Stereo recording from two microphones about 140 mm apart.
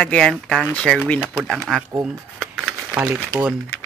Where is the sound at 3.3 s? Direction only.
20° left (ahead or behind).